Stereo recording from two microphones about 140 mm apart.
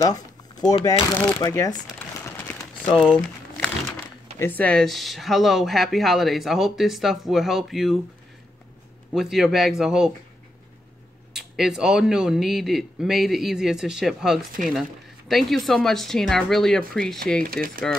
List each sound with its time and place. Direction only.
0.0 s speech: 30° left (ahead or behind)
3.0 s crumpling: 5° left (ahead or behind)
4.4 s speech: 10° left (ahead or behind)
9.1 s speech: 5° right (ahead or behind)
11.3 s speech: 5° right (ahead or behind)
17.4 s speech: 90° right